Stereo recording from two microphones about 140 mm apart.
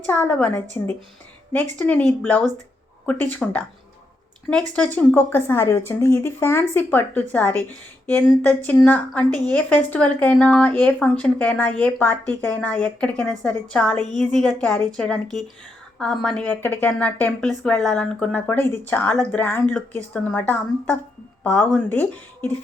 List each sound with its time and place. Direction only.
0.0 s a woman's voice: 10° left (ahead or behind)
4.9 s a woman's voice: 15° left (ahead or behind)